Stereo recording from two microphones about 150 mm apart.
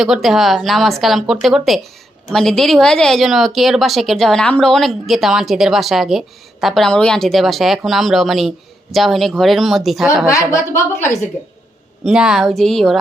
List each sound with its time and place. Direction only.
0.0 s a woman's voice: centre (ahead or behind)
10.2 s speech: 20° left (ahead or behind)
12.0 s a woman's voice: 5° right (ahead or behind)